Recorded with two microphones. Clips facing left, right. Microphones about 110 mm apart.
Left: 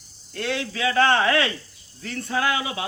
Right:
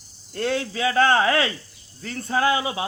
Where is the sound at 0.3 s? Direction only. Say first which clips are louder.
Right 3 dB; 35° right (ahead or behind).